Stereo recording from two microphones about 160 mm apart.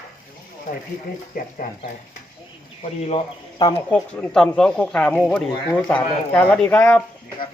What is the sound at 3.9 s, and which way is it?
Speech, 5° left (ahead or behind).